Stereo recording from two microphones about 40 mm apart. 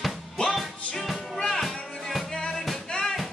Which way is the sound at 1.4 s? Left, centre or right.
Centre.